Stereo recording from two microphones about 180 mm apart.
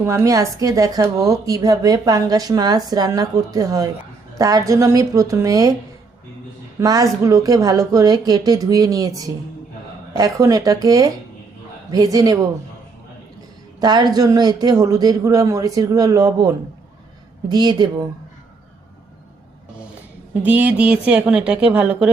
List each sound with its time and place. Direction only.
0.0 s a woman's voice: 15° right (ahead or behind)
6.7 s a woman's voice: 20° right (ahead or behind)
13.7 s a woman's voice: 25° right (ahead or behind)
20.4 s a woman's voice: 10° right (ahead or behind)